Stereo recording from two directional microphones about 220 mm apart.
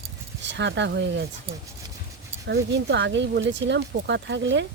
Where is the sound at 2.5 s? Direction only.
50° right (ahead or behind).